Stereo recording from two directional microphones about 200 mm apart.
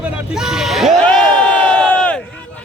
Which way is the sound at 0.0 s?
5° right (ahead or behind).